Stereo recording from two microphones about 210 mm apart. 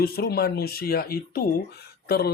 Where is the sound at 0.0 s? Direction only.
50° left (ahead or behind).